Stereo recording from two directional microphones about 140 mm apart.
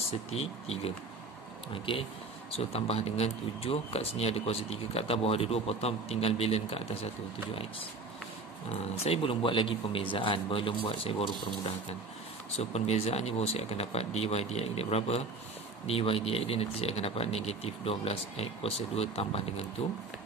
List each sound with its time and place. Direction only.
0.3 s speech: 45° left (ahead or behind)
8.6 s speech: 45° left (ahead or behind)
12.5 s speech: 50° left (ahead or behind)